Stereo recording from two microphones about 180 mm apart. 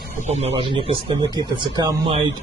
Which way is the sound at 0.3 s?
35° right (ahead or behind).